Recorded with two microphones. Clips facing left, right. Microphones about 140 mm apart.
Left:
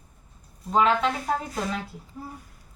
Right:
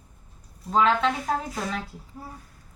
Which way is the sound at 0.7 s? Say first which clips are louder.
Even; 5° left (ahead or behind).